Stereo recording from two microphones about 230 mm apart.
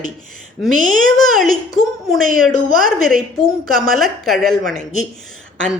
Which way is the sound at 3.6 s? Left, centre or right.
Centre.